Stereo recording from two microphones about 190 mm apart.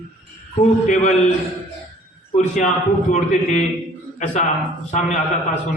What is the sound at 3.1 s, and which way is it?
A man's voice, 40° left (ahead or behind).